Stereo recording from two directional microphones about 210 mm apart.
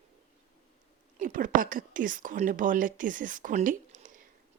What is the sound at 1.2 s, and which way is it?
A woman's voice, 40° right (ahead or behind).